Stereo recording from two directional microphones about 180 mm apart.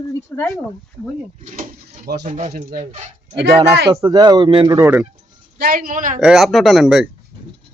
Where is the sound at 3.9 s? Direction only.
20° right (ahead or behind).